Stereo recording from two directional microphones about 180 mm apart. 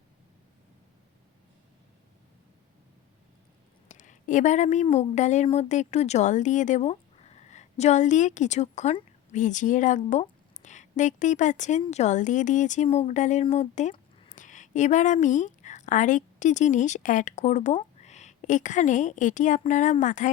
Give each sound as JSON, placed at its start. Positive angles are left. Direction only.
{"t": 3.8, "sound": "speech", "side_deg": 45}
{"t": 13.9, "sound": "a sound", "side_deg": 30}
{"t": 14.3, "sound": "a woman's voice", "side_deg": 45}